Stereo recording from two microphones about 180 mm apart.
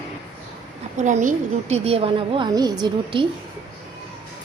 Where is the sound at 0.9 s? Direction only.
45° right (ahead or behind); by 3.2 s 25° right (ahead or behind).